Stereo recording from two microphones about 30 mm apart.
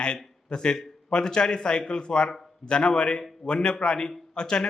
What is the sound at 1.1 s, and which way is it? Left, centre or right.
A man's voice, left.